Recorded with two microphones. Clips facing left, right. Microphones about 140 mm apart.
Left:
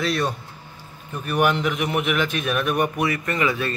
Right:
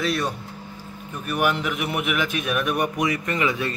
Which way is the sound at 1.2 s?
5° right (ahead or behind).